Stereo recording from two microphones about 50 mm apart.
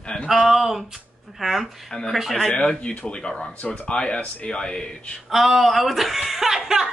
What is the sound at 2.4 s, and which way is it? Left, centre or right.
Speech, centre.